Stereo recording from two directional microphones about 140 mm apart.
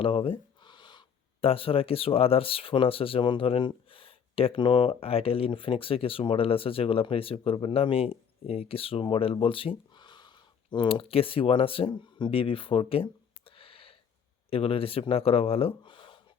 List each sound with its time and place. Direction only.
0.0 s speech: 40° left (ahead or behind)